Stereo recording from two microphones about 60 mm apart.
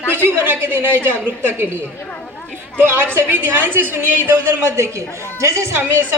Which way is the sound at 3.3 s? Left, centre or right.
Right.